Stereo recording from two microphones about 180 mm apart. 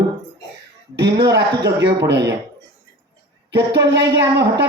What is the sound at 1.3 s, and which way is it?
A man's voice, 75° right (ahead or behind).